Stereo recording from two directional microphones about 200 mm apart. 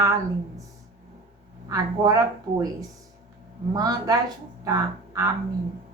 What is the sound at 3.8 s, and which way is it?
Speech, 20° right (ahead or behind).